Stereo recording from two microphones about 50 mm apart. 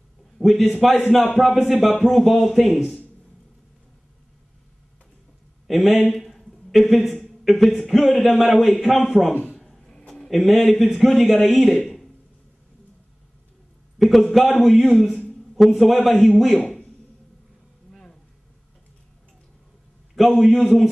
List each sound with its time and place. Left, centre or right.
0.4 s speech: centre
5.7 s speech: centre
9.3 s speech: left
9.8 s a sound: centre
10.3 s speech: centre
13.9 s speech: centre
20.2 s speech: centre